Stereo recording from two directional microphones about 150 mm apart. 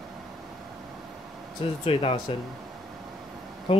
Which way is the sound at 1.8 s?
40° left (ahead or behind).